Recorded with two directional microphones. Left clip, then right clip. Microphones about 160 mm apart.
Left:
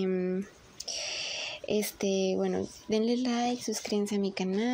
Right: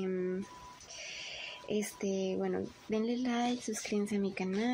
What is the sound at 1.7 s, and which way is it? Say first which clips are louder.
Speech: left 6 dB; 40° left (ahead or behind).